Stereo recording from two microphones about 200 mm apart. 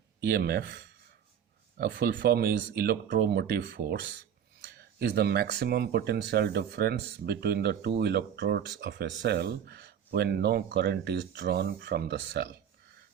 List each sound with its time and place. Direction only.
0.3 s speech: 50° right (ahead or behind)
1.8 s speech: 50° right (ahead or behind)